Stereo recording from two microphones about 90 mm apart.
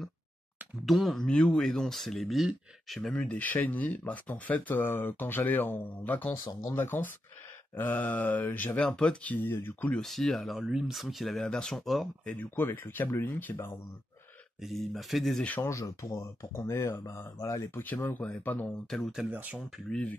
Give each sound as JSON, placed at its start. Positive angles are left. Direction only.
{"t": 0.8, "sound": "speech", "side_deg": 0}
{"t": 3.2, "sound": "speech", "side_deg": 15}
{"t": 8.8, "sound": "speech", "side_deg": 10}
{"t": 9.9, "sound": "speech", "side_deg": 5}
{"t": 10.6, "sound": "speech", "side_deg": -10}
{"t": 12.4, "sound": "speech", "side_deg": 25}
{"t": 14.6, "sound": "speech", "side_deg": 0}
{"t": 15.6, "sound": "speech", "side_deg": 35}
{"t": 18.9, "sound": "speech", "side_deg": 5}
{"t": 19.3, "sound": "speech", "side_deg": -20}
{"t": 19.9, "sound": "speech", "side_deg": 10}